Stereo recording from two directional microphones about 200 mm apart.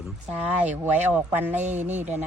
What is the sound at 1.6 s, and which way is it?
Speech, 35° right (ahead or behind).